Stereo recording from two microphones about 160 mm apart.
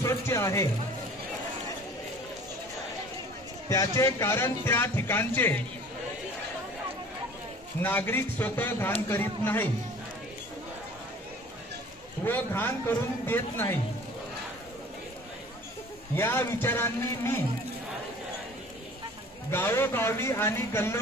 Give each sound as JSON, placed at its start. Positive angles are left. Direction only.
{"t": 0.0, "sound": "speech", "side_deg": 15}
{"t": 3.6, "sound": "speech", "side_deg": 20}
{"t": 7.8, "sound": "speech", "side_deg": 10}
{"t": 12.3, "sound": "speech", "side_deg": 10}
{"t": 16.2, "sound": "speech", "side_deg": 15}
{"t": 19.5, "sound": "speech", "side_deg": 15}